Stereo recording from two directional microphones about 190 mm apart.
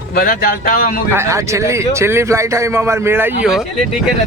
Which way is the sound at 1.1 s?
15° right (ahead or behind).